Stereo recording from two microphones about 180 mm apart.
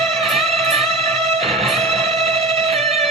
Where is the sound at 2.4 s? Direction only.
35° right (ahead or behind).